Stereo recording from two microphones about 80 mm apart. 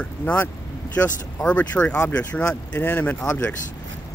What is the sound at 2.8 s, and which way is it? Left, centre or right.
Speech, left.